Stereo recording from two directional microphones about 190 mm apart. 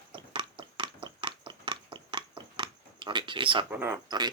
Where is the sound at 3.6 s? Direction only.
10° right (ahead or behind).